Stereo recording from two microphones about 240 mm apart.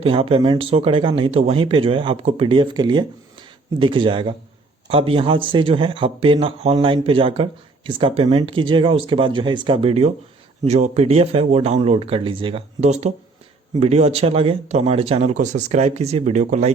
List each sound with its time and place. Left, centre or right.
0.0 s speech: right